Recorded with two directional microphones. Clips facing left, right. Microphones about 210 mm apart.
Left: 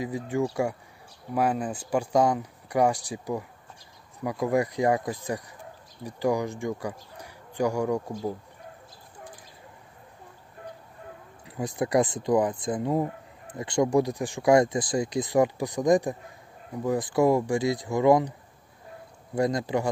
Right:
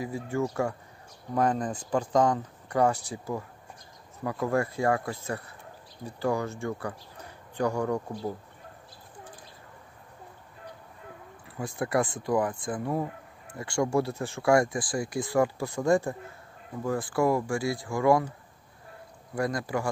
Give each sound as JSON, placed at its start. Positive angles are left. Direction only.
{"t": 0.0, "sound": "speech", "side_deg": 15}
{"t": 11.4, "sound": "speech", "side_deg": 20}
{"t": 19.3, "sound": "speech", "side_deg": 20}